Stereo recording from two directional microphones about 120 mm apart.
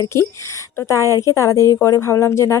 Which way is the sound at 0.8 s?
25° left (ahead or behind).